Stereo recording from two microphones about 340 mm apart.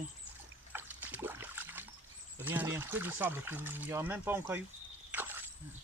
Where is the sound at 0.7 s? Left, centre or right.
Centre.